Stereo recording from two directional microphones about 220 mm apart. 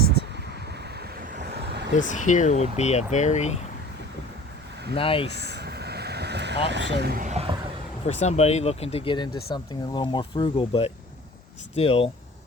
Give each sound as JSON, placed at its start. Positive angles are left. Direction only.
{"t": 0.0, "sound": "a sound", "side_deg": 45}
{"t": 0.9, "sound": "vehicle", "side_deg": -45}
{"t": 2.0, "sound": "speech", "side_deg": 35}
{"t": 4.9, "sound": "speech", "side_deg": 25}
{"t": 5.4, "sound": "vehicle", "side_deg": -45}
{"t": 8.0, "sound": "speech", "side_deg": 30}